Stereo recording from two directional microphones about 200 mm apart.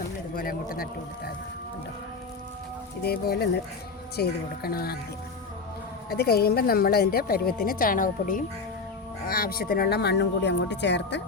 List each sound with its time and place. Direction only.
0.3 s speech: 45° left (ahead or behind)
3.0 s speech: 55° left (ahead or behind)
6.1 s speech: 50° left (ahead or behind)